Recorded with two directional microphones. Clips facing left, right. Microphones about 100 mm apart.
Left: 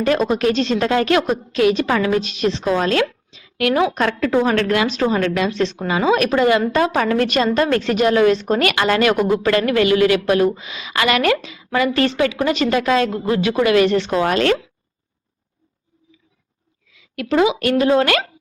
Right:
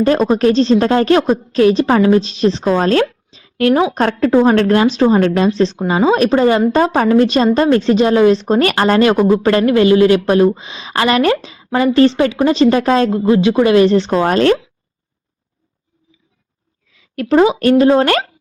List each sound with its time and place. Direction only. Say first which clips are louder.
0.0 s a woman's voice: right 5 dB; 35° right (ahead or behind)
16.9 s speech: right 6 dB; 40° right (ahead or behind)